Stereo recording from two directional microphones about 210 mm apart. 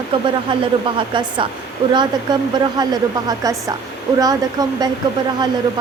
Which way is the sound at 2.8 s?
20° right (ahead or behind).